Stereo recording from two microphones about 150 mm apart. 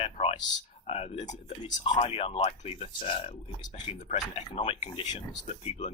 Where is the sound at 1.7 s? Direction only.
35° left (ahead or behind).